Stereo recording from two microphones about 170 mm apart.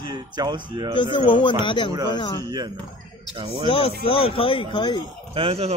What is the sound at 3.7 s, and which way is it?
Speech, 35° left (ahead or behind).